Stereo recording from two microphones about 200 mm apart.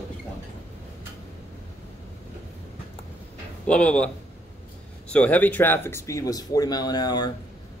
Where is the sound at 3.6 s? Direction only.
5° left (ahead or behind).